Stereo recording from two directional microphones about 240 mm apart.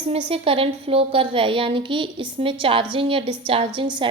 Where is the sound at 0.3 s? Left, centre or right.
Right.